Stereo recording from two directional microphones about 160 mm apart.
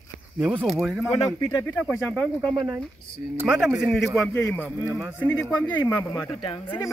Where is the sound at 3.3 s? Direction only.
5° right (ahead or behind).